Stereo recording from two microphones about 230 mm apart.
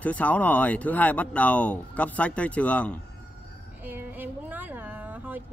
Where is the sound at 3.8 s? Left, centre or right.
Centre.